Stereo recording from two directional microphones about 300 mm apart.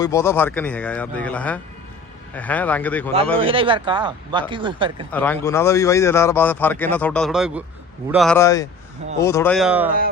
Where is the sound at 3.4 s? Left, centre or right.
Centre.